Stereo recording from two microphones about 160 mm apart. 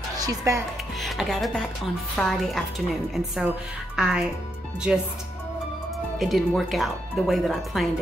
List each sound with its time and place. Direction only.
0.2 s speech: 20° right (ahead or behind)
1.0 s speech: centre (ahead or behind)
6.1 s speech: centre (ahead or behind)